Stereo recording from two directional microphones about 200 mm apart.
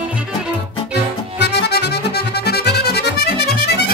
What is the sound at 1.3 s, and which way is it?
Accordion, 60° left (ahead or behind).